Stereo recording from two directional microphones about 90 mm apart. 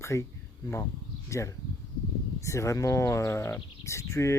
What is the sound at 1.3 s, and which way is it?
Speech, 35° left (ahead or behind).